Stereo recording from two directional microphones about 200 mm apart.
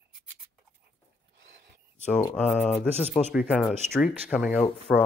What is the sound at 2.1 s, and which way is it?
Speech, 5° left (ahead or behind).